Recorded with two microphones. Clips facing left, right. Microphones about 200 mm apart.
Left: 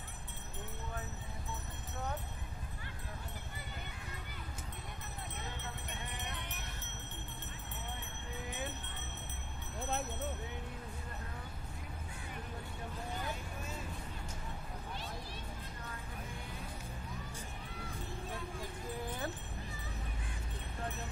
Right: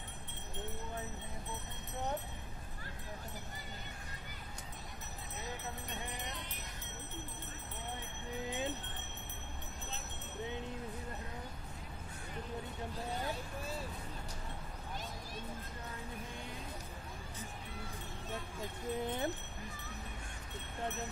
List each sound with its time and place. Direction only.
8.5 s jingle bell: 20° right (ahead or behind)
13.2 s vehicle: 35° right (ahead or behind)
18.6 s jingle bell: 25° right (ahead or behind)